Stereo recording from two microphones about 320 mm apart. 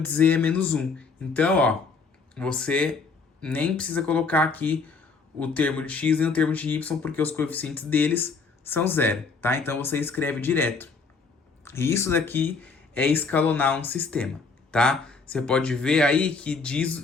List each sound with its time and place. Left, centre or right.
0.0 s speech: centre